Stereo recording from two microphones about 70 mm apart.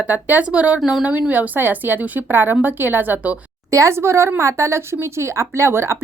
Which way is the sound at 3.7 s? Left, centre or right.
Right.